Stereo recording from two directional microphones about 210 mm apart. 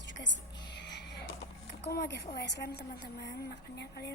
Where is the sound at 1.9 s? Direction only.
50° left (ahead or behind).